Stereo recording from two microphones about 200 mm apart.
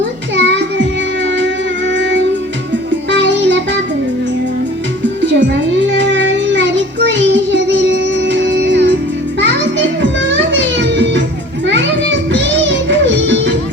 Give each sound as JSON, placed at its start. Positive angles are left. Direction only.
{"t": 0.3, "sound": "music", "side_deg": -65}
{"t": 1.9, "sound": "music", "side_deg": -65}
{"t": 5.2, "sound": "child singing", "side_deg": -65}
{"t": 9.4, "sound": "music", "side_deg": -65}